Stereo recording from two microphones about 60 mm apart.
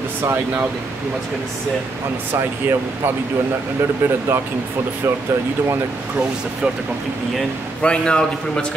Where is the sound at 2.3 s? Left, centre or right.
Right.